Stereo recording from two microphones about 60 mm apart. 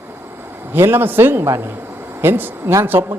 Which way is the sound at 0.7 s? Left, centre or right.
Right.